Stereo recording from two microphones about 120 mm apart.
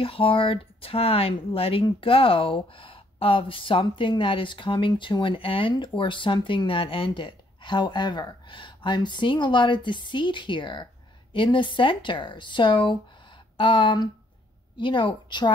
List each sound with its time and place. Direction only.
0.0 s a woman's voice: 50° left (ahead or behind)